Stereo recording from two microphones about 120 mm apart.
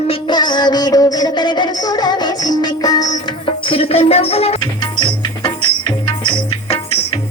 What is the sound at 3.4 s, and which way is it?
Music, 50° left (ahead or behind).